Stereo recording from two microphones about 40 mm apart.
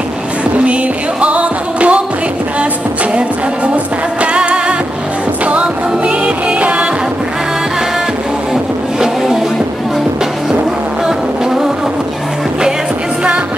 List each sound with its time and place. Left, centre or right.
1.2 s music: right
3.2 s music: right
9.0 s vehicle: centre